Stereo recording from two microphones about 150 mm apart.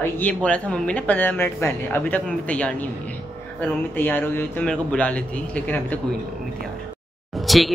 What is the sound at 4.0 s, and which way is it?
Speech, 15° left (ahead or behind).